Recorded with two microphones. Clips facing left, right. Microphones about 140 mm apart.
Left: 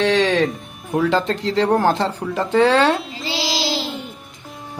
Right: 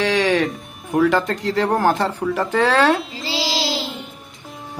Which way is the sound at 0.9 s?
20° left (ahead or behind).